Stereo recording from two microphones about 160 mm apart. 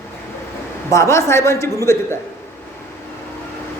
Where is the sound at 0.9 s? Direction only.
20° left (ahead or behind).